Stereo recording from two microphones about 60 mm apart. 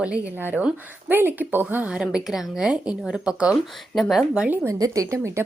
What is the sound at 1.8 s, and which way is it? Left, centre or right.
A woman's voice, centre.